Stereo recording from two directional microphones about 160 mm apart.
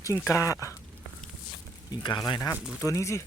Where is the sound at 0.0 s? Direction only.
20° left (ahead or behind).